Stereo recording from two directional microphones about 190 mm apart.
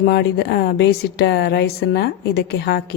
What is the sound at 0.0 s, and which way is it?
Speech, 60° left (ahead or behind).